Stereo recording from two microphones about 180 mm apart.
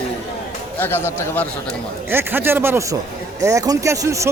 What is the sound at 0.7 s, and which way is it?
Speech, 10° left (ahead or behind).